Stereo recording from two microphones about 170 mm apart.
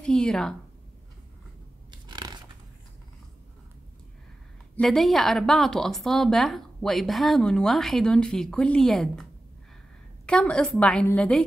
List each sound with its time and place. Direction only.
0.0 s speech: 5° left (ahead or behind)
1.9 s scissors: 25° right (ahead or behind)
4.7 s speech: centre (ahead or behind)